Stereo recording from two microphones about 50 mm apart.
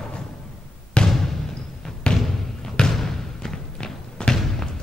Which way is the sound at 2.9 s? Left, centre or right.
Centre.